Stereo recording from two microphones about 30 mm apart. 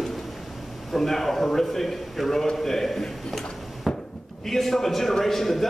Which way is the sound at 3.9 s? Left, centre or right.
Centre.